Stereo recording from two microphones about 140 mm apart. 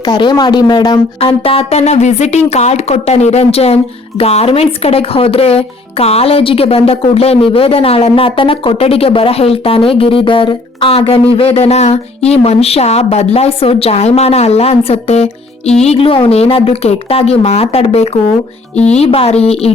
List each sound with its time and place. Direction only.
0.0 s speech: 30° left (ahead or behind)
1.2 s speech: 45° left (ahead or behind)